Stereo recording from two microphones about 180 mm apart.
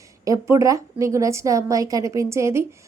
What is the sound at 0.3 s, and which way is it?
A woman's voice, 15° right (ahead or behind).